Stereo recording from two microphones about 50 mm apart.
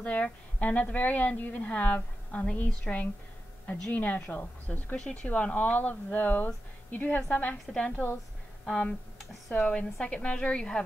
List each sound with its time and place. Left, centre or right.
0.0 s a woman's voice: left
5.1 s a woman's voice: left